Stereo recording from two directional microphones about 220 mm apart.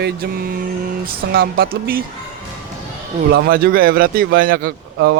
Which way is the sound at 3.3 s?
40° right (ahead or behind).